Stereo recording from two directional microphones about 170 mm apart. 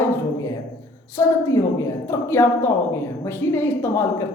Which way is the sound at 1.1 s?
15° left (ahead or behind).